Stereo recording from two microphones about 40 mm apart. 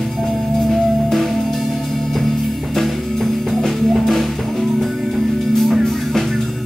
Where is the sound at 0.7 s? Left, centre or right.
Centre.